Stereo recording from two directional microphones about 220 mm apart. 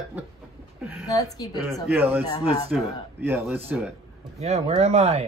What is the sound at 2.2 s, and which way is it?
Speech, 15° left (ahead or behind).